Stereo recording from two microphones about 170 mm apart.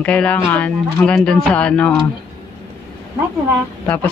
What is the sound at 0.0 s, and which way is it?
Speech, 10° left (ahead or behind).